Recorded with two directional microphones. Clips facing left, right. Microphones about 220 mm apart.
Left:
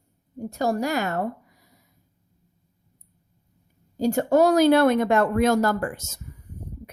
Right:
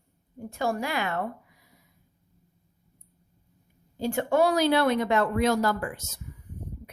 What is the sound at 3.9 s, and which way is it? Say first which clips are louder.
A woman's voice: left 5 dB; 40° left (ahead or behind).